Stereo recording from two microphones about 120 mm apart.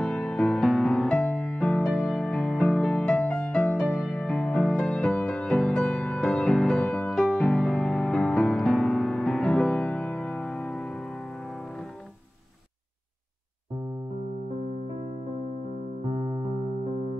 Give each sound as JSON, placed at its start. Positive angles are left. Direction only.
{"t": 0.0, "sound": "music", "side_deg": 5}
{"t": 16.1, "sound": "music", "side_deg": -50}